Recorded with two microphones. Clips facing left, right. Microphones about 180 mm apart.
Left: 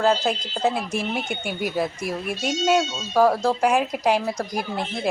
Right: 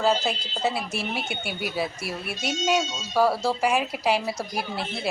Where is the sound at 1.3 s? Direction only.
45° left (ahead or behind).